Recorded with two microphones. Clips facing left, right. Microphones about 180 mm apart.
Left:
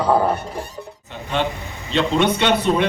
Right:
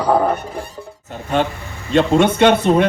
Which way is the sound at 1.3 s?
45° right (ahead or behind).